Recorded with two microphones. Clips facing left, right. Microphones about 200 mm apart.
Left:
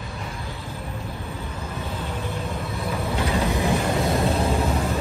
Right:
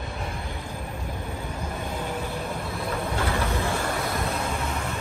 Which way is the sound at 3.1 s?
15° left (ahead or behind).